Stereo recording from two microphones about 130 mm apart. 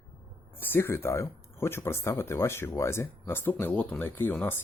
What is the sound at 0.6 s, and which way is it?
Speech, 15° left (ahead or behind).